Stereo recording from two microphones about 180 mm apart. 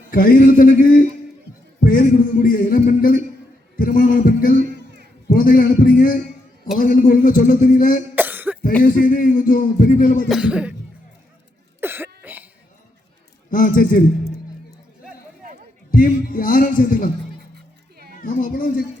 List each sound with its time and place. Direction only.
0.1 s heart sounds: 50° left (ahead or behind)
4.7 s a sound: 70° right (ahead or behind)
5.3 s heart sounds: 50° left (ahead or behind)
8.1 s cough: 10° right (ahead or behind)
8.8 s heart sounds: 50° left (ahead or behind)
10.2 s speech: 5° right (ahead or behind)
11.8 s cough: 10° right (ahead or behind)
13.5 s a man's voice: 50° left (ahead or behind)
15.9 s heart sounds: 50° left (ahead or behind)
18.2 s heart sounds: 50° left (ahead or behind)